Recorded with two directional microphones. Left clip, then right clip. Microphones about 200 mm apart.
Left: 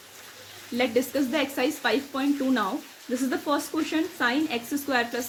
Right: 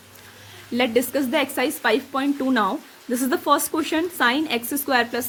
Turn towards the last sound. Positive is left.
turn(degrees=-40)  # may be behind; listen again after turning